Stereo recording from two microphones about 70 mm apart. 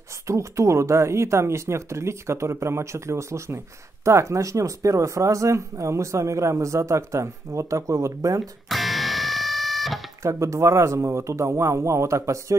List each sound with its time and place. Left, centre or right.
0.3 s speech: right
8.6 s music: centre
10.2 s speech: right